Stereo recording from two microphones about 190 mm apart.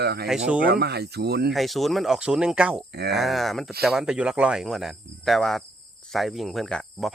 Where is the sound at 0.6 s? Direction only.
55° right (ahead or behind).